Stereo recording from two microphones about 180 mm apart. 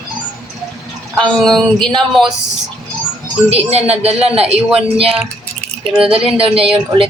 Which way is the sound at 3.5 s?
35° right (ahead or behind).